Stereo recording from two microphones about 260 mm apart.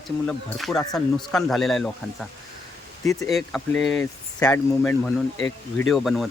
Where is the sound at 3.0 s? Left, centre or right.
Centre.